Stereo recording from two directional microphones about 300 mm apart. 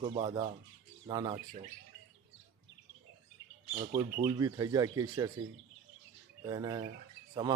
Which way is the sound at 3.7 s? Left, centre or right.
Centre.